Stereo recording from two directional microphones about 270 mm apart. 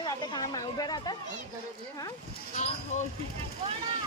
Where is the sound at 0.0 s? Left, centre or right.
Centre.